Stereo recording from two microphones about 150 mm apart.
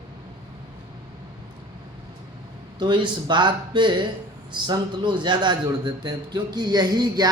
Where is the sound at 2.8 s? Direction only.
30° right (ahead or behind).